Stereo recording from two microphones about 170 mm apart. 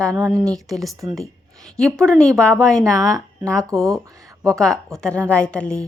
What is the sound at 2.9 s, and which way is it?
Speech, 20° right (ahead or behind).